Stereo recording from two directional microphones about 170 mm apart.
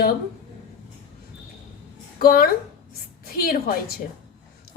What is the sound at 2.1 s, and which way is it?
A woman's voice, 60° left (ahead or behind).